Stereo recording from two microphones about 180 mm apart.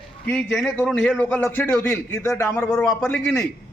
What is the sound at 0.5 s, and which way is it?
A man's voice, 5° left (ahead or behind).